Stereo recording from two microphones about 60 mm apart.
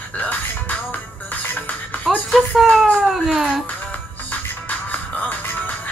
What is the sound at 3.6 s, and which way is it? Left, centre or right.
Music, left.